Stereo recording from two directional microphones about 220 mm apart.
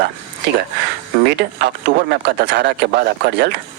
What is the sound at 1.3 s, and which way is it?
Speech, 50° right (ahead or behind).